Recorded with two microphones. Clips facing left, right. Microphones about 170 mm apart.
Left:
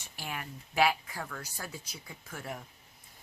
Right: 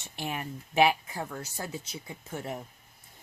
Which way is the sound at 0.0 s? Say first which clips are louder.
Right 5 dB; 25° right (ahead or behind).